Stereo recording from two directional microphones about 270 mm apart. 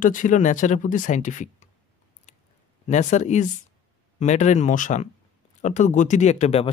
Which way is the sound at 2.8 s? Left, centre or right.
Left.